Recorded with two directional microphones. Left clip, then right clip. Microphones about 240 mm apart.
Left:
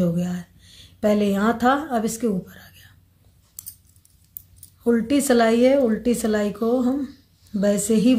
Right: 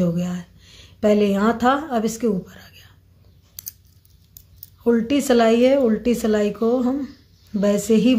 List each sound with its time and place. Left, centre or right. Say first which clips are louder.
0.0 s speech: right 1 dB; centre
4.8 s a woman's voice: right 1 dB; centre